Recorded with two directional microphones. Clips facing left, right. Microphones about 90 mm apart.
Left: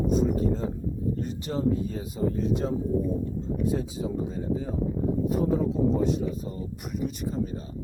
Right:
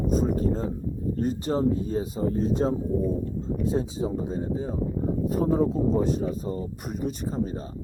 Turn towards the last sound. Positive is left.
turn(degrees=-40)  # may be behind; listen again after turning